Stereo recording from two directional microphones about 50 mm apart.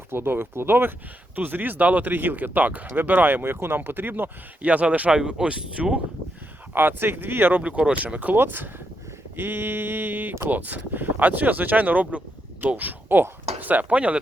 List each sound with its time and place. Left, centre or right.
0.1 s speech: right
4.6 s speech: right
6.7 s speech: right
7.6 s speech: right